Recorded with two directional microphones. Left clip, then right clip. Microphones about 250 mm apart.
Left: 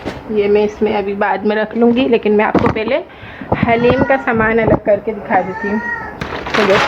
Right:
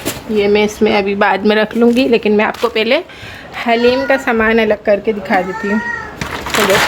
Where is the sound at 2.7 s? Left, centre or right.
Right.